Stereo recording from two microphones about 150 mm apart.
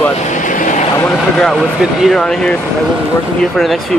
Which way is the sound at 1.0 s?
5° left (ahead or behind).